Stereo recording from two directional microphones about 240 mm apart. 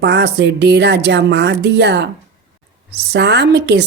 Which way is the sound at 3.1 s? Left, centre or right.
Right.